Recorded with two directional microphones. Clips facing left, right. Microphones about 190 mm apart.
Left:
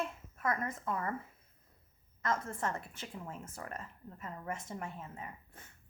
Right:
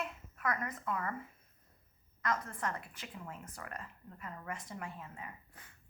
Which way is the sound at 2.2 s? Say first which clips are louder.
Left 2 dB; 25° left (ahead or behind).